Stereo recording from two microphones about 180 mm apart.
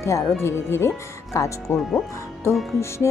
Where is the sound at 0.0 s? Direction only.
15° left (ahead or behind).